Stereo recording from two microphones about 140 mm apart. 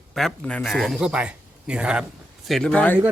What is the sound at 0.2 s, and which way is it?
Speech, 5° left (ahead or behind).